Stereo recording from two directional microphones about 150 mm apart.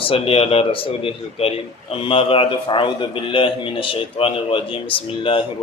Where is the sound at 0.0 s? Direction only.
40° left (ahead or behind).